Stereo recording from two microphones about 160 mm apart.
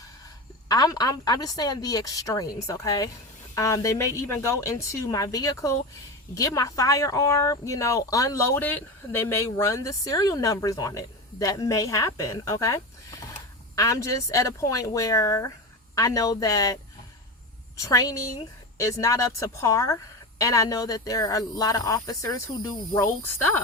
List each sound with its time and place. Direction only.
0.7 s speech: 25° left (ahead or behind)
17.7 s speech: 20° left (ahead or behind)